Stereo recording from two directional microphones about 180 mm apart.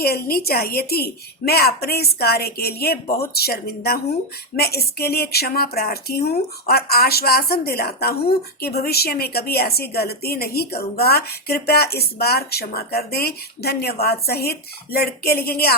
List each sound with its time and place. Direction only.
0.0 s a woman's voice: 60° left (ahead or behind)